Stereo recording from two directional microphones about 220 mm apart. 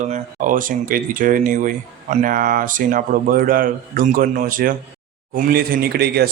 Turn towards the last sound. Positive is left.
turn(degrees=-45)  # may be behind; listen again after turning